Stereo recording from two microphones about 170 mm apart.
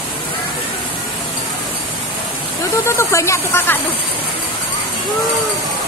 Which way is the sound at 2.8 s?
15° left (ahead or behind).